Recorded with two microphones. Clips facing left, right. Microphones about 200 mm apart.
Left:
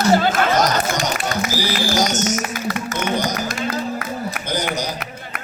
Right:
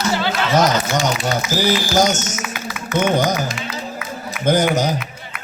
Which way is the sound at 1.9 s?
50° right (ahead or behind).